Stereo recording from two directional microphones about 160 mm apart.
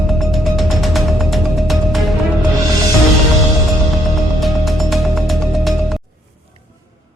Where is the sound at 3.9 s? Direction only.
Centre (ahead or behind).